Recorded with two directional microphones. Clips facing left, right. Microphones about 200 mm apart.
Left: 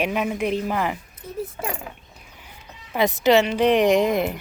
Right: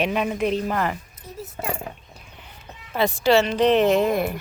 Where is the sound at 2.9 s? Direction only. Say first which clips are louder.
Left 1 dB; 15° left (ahead or behind).